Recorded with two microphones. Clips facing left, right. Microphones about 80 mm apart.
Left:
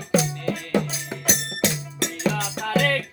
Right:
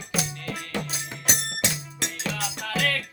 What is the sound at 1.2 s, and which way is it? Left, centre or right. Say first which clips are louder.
Music: left 4 dB; left.